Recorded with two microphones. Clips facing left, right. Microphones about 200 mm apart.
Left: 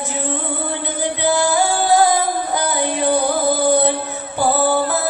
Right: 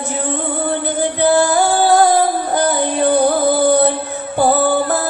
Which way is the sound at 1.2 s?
55° right (ahead or behind).